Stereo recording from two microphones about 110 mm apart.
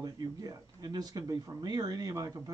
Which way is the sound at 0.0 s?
35° right (ahead or behind).